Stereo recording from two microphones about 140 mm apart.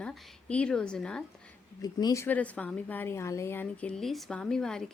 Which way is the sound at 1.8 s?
25° left (ahead or behind).